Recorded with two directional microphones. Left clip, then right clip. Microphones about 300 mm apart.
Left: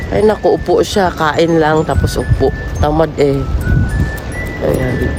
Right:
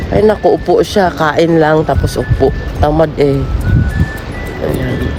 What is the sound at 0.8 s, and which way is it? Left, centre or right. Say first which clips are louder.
Speech: right 2 dB; centre.